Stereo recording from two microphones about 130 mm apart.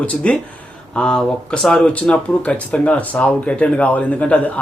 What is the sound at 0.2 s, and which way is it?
Speech, 10° left (ahead or behind).